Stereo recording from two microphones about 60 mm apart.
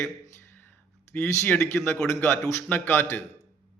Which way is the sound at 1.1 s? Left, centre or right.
Left.